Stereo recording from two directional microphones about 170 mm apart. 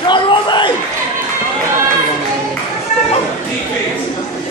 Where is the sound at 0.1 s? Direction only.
25° left (ahead or behind).